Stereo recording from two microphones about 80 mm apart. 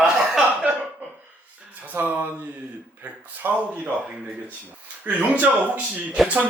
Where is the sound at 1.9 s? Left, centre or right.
Right.